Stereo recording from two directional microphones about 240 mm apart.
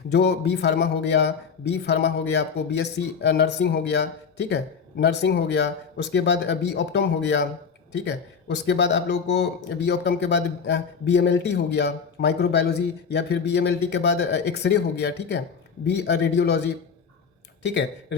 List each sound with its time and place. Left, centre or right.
0.1 s speech: left